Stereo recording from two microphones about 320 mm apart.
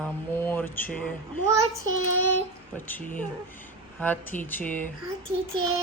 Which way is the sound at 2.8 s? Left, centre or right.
Centre.